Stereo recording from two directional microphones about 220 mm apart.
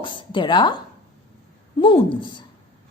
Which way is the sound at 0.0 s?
20° left (ahead or behind).